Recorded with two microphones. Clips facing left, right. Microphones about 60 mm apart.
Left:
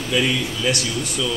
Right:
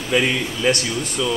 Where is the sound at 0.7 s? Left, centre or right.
Right.